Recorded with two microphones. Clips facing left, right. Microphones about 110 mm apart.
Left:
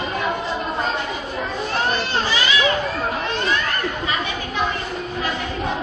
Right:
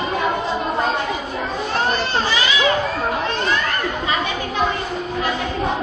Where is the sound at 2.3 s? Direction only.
Centre (ahead or behind).